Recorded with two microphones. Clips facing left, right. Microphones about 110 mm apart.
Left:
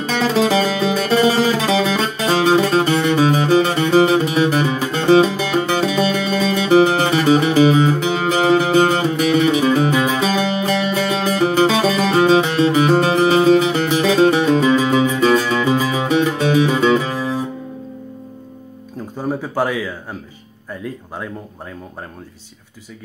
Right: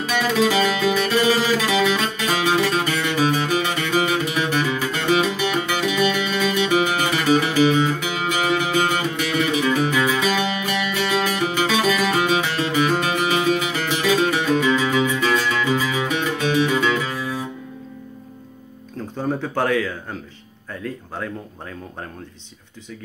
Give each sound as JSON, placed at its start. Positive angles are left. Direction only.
{"t": 0.2, "sound": "music", "side_deg": 30}
{"t": 15.0, "sound": "music", "side_deg": 40}
{"t": 15.6, "sound": "music", "side_deg": 25}
{"t": 19.1, "sound": "a sound", "side_deg": 10}